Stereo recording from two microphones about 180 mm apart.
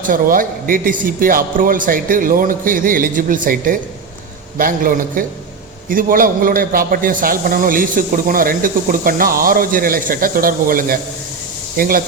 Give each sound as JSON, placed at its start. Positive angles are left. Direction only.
{"t": 0.0, "sound": "a man's voice", "side_deg": -50}